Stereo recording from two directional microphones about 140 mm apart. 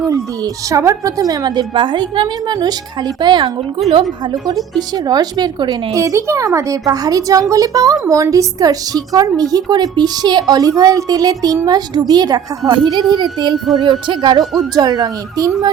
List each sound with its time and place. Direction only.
0.7 s a woman's voice: 20° right (ahead or behind)
5.0 s a woman's voice: 30° right (ahead or behind)